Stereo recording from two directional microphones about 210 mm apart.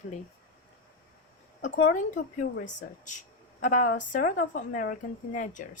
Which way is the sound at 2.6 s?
35° left (ahead or behind).